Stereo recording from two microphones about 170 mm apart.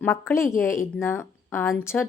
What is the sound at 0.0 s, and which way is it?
A woman's voice, 15° left (ahead or behind).